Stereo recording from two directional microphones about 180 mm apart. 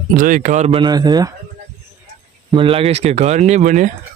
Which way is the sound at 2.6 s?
30° right (ahead or behind).